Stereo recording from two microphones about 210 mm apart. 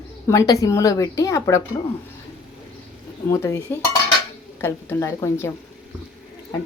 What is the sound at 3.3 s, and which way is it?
A woman's voice, 15° left (ahead or behind).